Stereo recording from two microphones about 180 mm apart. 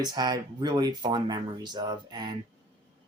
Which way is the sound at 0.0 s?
25° right (ahead or behind).